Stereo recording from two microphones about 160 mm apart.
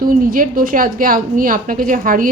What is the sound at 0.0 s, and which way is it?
A woman's voice, 60° right (ahead or behind).